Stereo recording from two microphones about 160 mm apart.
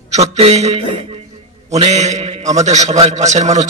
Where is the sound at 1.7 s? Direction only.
45° right (ahead or behind).